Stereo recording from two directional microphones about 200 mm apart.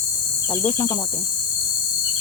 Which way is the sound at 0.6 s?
15° left (ahead or behind).